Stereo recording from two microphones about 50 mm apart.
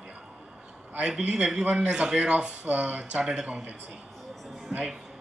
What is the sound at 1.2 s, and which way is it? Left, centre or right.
Speech, centre.